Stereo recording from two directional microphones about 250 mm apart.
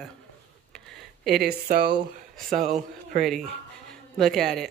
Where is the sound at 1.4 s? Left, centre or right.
Right.